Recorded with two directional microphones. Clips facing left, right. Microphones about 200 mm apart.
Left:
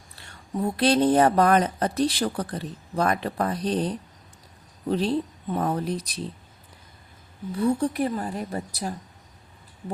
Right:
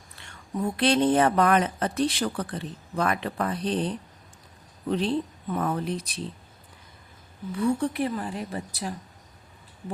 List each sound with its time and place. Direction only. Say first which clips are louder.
0.2 s speech: left 2 dB; 40° left (ahead or behind)
7.5 s speech: left 2 dB; 40° left (ahead or behind)